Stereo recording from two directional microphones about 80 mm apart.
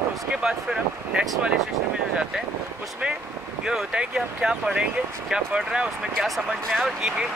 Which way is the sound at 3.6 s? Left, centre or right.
Centre.